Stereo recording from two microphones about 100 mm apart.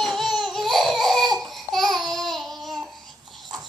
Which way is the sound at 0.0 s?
Centre (ahead or behind).